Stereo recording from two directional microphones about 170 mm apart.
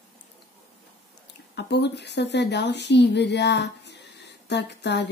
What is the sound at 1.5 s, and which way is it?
Speech, 80° left.